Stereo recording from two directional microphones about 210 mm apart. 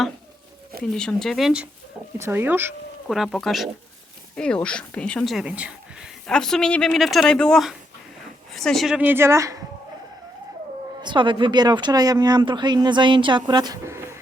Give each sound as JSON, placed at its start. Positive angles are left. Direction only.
{"t": 0.9, "sound": "speech", "side_deg": 0}
{"t": 2.1, "sound": "speech", "side_deg": -10}
{"t": 11.0, "sound": "speech", "side_deg": -20}